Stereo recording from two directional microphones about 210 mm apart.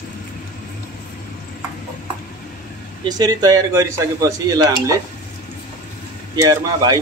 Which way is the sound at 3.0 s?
20° right (ahead or behind).